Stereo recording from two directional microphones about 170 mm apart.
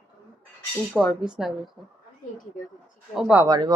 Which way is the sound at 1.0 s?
Centre (ahead or behind).